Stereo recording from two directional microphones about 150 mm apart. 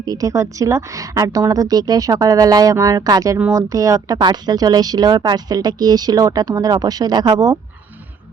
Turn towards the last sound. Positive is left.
turn(degrees=-25)  # may be behind; listen again after turning